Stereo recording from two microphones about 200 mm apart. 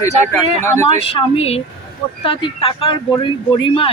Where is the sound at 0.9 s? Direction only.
30° left (ahead or behind).